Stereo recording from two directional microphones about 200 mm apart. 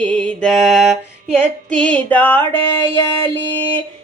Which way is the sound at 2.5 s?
20° left (ahead or behind).